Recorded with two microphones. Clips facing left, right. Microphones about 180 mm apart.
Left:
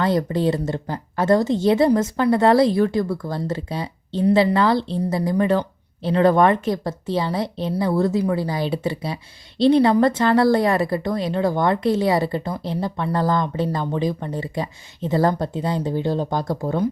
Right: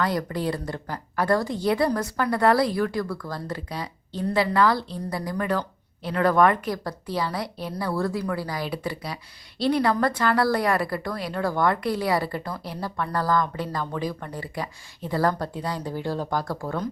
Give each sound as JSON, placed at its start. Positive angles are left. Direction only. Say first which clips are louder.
{"t": 0.0, "sound": "speech", "louder": "left 6 dB", "side_deg": 25}